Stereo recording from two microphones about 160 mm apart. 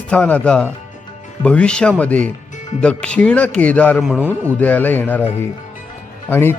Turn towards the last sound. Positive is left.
turn(degrees=15)  # may be behind; listen again after turning